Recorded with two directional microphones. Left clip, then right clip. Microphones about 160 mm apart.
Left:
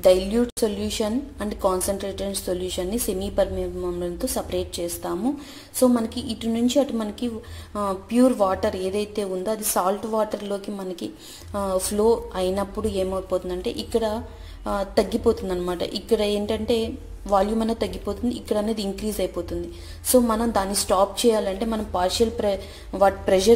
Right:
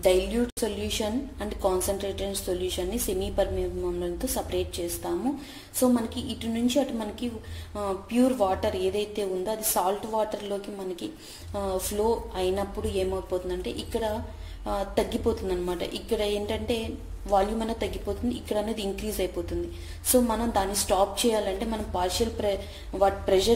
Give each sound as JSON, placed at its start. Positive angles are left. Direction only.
{"t": 0.0, "sound": "a woman's voice", "side_deg": 35}